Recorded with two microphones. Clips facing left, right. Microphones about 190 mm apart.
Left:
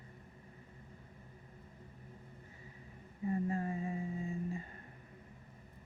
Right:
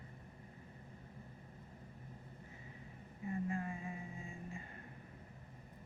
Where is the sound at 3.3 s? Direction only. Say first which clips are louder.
Left 4 dB; 35° left (ahead or behind).